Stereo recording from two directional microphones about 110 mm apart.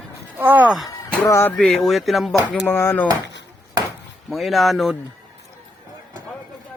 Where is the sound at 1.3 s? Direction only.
25° left (ahead or behind).